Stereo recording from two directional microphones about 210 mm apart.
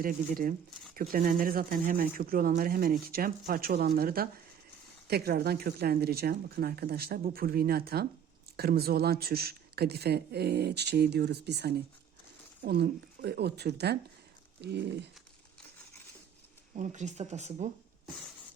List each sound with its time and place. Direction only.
0.0 s speech: 40° right (ahead or behind)
16.7 s speech: 35° right (ahead or behind)